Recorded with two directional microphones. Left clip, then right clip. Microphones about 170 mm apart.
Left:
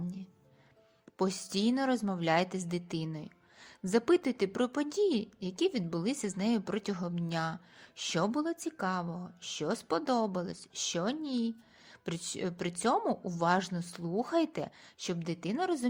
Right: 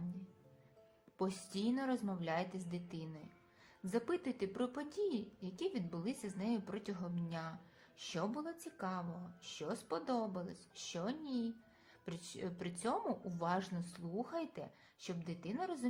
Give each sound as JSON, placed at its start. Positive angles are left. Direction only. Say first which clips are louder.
{"t": 1.2, "sound": "a woman's voice", "louder": "left 9 dB", "side_deg": 45}